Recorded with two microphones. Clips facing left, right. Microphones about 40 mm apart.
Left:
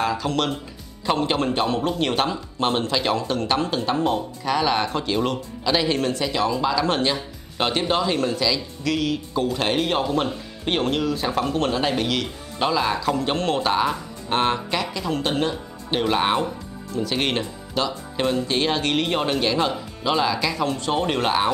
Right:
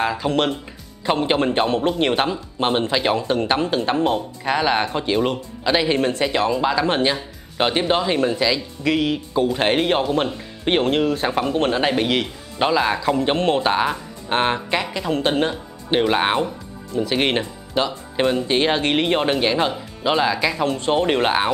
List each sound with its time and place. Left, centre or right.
0.0 s speech: right
11.3 s speech: right
20.6 s speech: right